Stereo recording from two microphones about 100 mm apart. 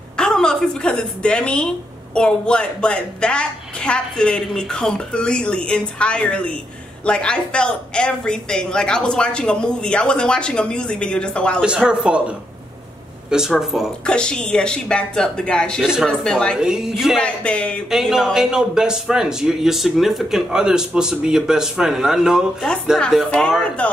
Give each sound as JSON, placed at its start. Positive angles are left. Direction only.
{"t": 0.2, "sound": "a woman's voice", "side_deg": 5}
{"t": 11.6, "sound": "a man's voice", "side_deg": -10}
{"t": 14.0, "sound": "speech", "side_deg": 10}
{"t": 15.8, "sound": "a man's voice", "side_deg": -5}
{"t": 16.1, "sound": "speech", "side_deg": 10}
{"t": 16.5, "sound": "a man's voice", "side_deg": -5}
{"t": 17.2, "sound": "speech", "side_deg": 10}
{"t": 17.8, "sound": "a man's voice", "side_deg": -5}
{"t": 23.8, "sound": "speech", "side_deg": 15}